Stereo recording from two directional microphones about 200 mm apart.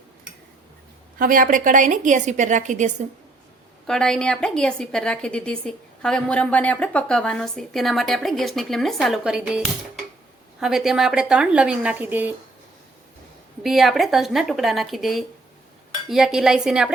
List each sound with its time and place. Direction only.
1.2 s a woman's voice: 45° right (ahead or behind)
3.8 s a woman's voice: centre (ahead or behind)
13.6 s a woman's voice: centre (ahead or behind)